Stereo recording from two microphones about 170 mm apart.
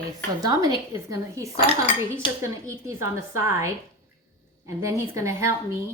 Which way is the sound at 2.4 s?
15° right (ahead or behind).